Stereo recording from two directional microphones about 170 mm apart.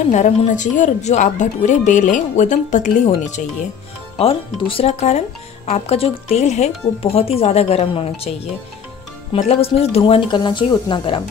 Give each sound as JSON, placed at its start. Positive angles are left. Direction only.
{"t": 0.1, "sound": "a woman's voice", "side_deg": 45}
{"t": 4.2, "sound": "speech", "side_deg": 35}
{"t": 9.5, "sound": "speech", "side_deg": 35}